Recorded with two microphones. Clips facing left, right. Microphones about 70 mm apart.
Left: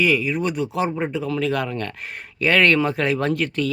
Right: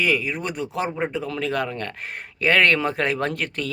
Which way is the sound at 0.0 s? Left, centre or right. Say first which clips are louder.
Left 3 dB; right.